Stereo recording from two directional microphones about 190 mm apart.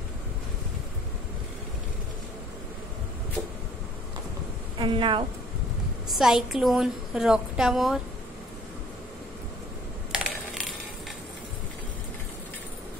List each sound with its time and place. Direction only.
4.7 s a woman's voice: 25° right (ahead or behind)
6.1 s a woman's voice: centre (ahead or behind)
10.1 s a sound: centre (ahead or behind)